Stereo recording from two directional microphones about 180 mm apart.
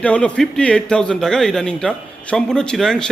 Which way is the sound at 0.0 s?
5° left (ahead or behind).